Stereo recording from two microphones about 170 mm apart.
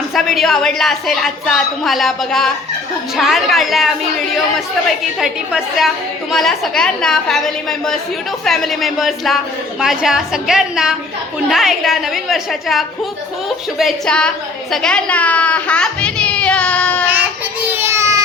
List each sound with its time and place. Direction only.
0.1 s a woman's voice: centre (ahead or behind)
17.7 s child singing: 15° right (ahead or behind)